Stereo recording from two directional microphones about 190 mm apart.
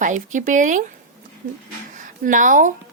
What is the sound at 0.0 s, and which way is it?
Speech, 40° right (ahead or behind).